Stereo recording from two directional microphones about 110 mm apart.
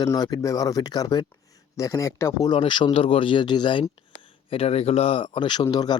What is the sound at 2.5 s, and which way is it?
Speech, 50° left (ahead or behind).